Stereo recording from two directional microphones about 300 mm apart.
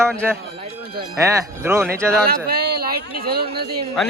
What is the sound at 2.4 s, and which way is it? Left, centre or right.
Speech, right.